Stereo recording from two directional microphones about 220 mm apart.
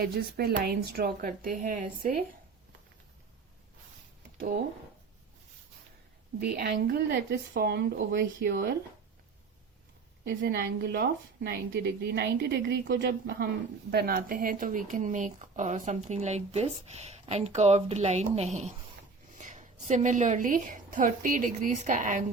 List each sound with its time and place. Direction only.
0.0 s a woman's voice: 45° right (ahead or behind)
6.4 s a woman's voice: 45° right (ahead or behind)
10.2 s a woman's voice: 45° right (ahead or behind)